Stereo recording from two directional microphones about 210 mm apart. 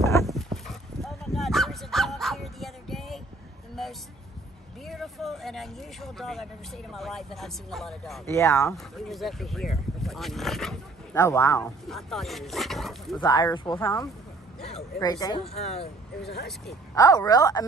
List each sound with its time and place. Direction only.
0.7 s dog: centre (ahead or behind)
3.8 s a sound: centre (ahead or behind)
4.8 s vehicle: centre (ahead or behind)
6.9 s speech: centre (ahead or behind)
8.3 s speech: 15° left (ahead or behind)
8.7 s speech: centre (ahead or behind)
11.1 s speech: 15° left (ahead or behind)
11.9 s speech: centre (ahead or behind)
13.2 s speech: 15° left (ahead or behind)
15.4 s speech: 30° left (ahead or behind)
16.9 s speech: 15° left (ahead or behind)